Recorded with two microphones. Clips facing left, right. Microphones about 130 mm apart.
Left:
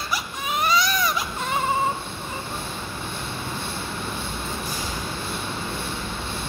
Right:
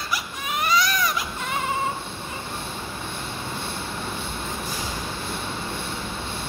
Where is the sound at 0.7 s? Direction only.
25° left (ahead or behind).